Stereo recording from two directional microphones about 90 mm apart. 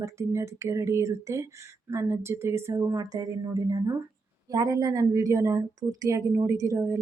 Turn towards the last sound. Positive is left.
turn(degrees=-35)  # may be behind; listen again after turning